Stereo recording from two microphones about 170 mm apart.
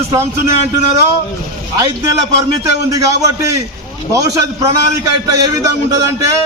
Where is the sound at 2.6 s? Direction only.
20° right (ahead or behind).